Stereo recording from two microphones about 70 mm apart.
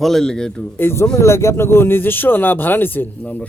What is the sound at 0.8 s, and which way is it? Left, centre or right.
A man's voice, left.